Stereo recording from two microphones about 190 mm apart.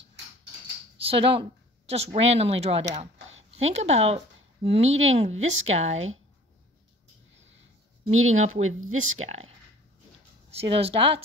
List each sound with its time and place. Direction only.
1.0 s speech: 30° right (ahead or behind)
8.3 s speech: 35° right (ahead or behind)
8.6 s speech: 90° right
10.5 s a woman's voice: 30° right (ahead or behind)